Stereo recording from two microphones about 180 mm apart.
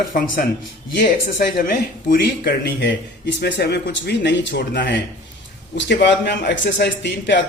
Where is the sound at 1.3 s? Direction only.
50° left (ahead or behind); by 4.7 s 75° left (ahead or behind).